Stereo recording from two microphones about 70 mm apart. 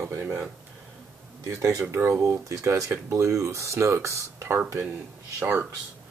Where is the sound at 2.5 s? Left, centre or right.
Right.